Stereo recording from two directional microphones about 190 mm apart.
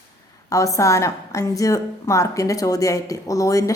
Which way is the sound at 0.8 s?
15° left (ahead or behind).